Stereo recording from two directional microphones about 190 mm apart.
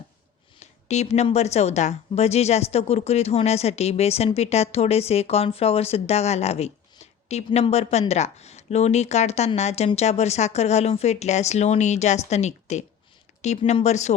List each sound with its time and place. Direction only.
0.6 s a woman's voice: 35° left (ahead or behind)